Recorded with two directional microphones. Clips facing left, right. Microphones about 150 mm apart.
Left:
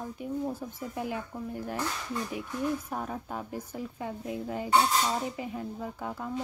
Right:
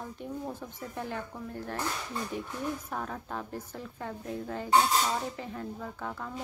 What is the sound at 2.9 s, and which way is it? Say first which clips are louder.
Speech: left 1 dB; 10° left (ahead or behind).